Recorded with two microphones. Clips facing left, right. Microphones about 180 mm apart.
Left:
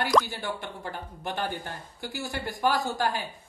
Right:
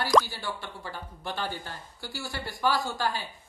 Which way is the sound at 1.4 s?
50° left (ahead or behind).